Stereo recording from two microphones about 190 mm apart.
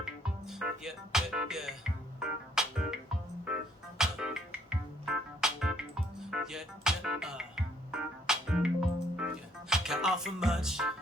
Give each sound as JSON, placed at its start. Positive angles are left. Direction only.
{"t": 0.0, "sound": "music", "side_deg": -5}